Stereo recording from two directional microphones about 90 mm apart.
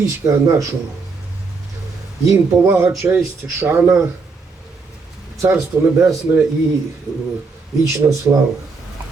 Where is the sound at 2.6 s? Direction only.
25° right (ahead or behind).